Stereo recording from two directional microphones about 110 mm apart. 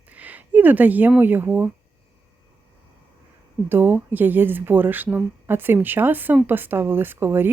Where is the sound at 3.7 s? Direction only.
20° right (ahead or behind).